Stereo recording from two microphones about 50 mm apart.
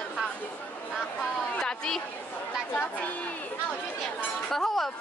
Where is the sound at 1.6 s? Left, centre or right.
Centre.